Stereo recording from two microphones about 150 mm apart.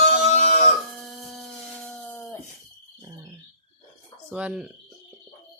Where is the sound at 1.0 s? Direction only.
5° left (ahead or behind).